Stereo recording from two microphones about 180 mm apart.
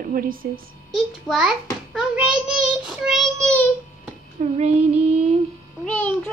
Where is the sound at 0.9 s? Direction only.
Centre (ahead or behind).